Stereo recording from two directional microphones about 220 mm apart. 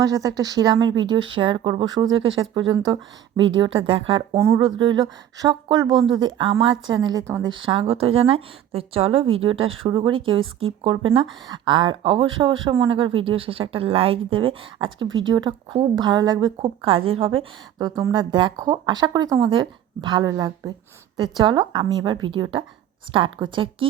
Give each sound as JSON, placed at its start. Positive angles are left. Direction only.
{"t": 0.0, "sound": "a woman's voice", "side_deg": -15}
{"t": 2.2, "sound": "speech", "side_deg": -60}
{"t": 2.6, "sound": "a woman's voice", "side_deg": -20}
{"t": 15.0, "sound": "speech", "side_deg": -60}
{"t": 15.3, "sound": "a woman's voice", "side_deg": -20}